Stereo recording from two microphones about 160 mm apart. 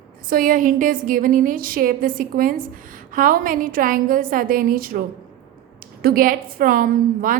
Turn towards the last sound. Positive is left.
turn(degrees=-60)  # may be behind; listen again after turning